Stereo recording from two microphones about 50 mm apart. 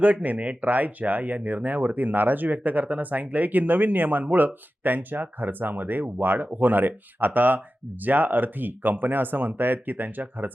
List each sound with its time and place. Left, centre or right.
0.0 s speech: right